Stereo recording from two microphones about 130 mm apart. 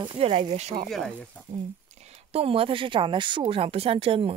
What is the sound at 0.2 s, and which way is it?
Speech, 50° right (ahead or behind).